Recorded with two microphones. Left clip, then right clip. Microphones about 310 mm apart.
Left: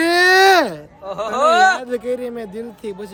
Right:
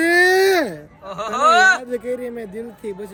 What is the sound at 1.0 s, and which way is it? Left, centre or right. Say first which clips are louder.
Speech: even; centre.